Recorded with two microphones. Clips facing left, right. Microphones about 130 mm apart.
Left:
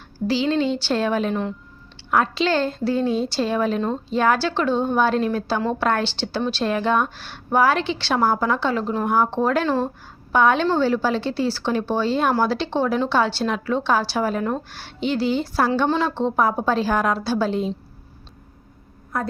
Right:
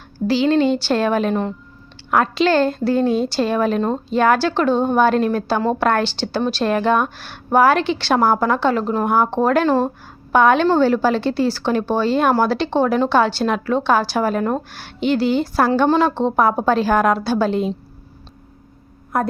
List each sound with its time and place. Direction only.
0.3 s a woman's voice: 55° right (ahead or behind)